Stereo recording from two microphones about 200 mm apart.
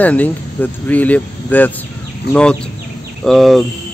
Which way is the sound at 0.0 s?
10° left (ahead or behind).